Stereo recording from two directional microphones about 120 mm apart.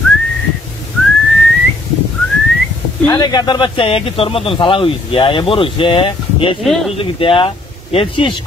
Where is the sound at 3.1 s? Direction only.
35° left (ahead or behind).